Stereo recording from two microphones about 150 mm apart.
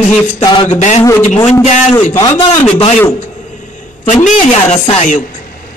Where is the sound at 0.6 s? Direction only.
50° left (ahead or behind).